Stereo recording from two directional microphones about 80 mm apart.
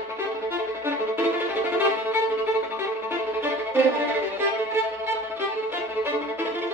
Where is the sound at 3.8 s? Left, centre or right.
Right.